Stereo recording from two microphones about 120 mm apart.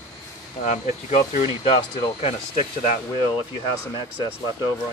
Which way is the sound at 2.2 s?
65° left (ahead or behind).